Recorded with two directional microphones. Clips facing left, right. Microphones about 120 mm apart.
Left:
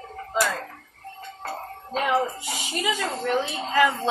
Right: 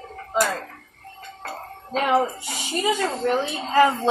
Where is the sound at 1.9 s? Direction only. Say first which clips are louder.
Right 3 dB; 40° right (ahead or behind).